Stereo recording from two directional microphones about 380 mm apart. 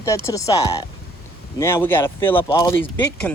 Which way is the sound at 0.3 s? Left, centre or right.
Centre.